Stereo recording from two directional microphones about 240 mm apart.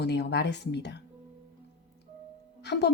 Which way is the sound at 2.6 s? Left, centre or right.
Left.